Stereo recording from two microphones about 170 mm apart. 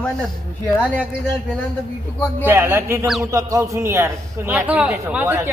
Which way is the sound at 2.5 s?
15° right (ahead or behind).